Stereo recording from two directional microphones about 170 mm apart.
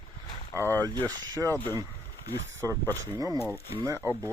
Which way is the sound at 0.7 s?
20° right (ahead or behind).